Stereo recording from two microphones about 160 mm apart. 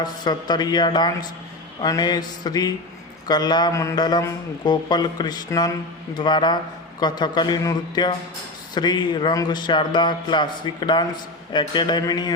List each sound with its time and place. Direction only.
0.0 s a man's voice: 25° left (ahead or behind)